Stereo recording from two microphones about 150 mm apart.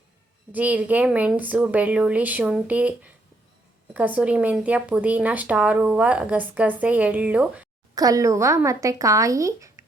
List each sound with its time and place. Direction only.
0.5 s speech: 10° right (ahead or behind)
7.9 s speech: 25° right (ahead or behind)